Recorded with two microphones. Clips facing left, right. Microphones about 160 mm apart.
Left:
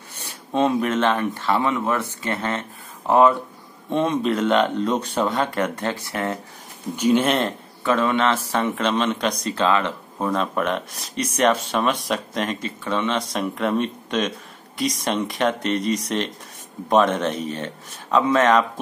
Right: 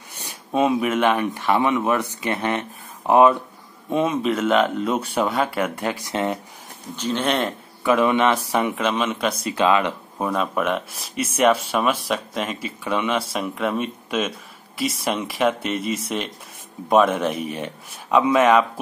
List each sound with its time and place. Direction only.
0.2 s speech: 10° right (ahead or behind)
3.9 s speech: 5° right (ahead or behind)
7.0 s speech: 10° left (ahead or behind)
7.8 s speech: 15° right (ahead or behind)